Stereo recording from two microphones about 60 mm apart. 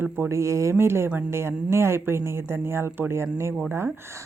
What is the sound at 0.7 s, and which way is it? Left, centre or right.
Speech, right.